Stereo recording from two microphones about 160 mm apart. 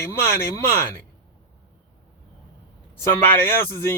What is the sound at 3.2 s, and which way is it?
Speech, 15° left (ahead or behind).